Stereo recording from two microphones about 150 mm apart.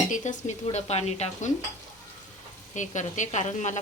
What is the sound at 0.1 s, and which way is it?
Speech, 50° left (ahead or behind).